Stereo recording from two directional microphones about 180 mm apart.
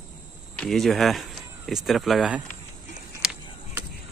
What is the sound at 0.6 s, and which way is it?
Speech, centre (ahead or behind).